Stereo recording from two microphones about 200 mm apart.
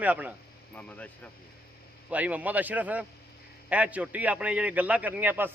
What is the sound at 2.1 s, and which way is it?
A man's voice, 5° right (ahead or behind).